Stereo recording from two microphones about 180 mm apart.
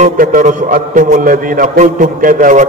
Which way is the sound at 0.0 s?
50° right (ahead or behind).